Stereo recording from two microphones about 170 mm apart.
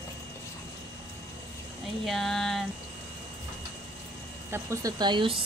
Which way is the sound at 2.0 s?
Centre (ahead or behind).